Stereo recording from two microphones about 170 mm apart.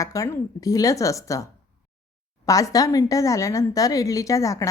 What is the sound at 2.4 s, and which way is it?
A woman's voice, 20° left (ahead or behind).